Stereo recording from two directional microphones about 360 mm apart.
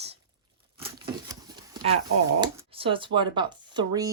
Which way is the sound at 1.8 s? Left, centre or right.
Centre.